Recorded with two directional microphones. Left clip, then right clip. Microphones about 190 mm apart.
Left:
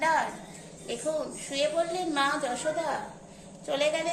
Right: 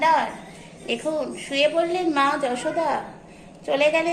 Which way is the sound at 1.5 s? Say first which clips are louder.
Right 7 dB; 20° right (ahead or behind).